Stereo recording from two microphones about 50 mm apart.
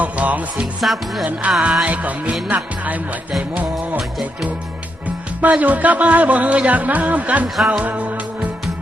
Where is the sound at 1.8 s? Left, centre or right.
Right.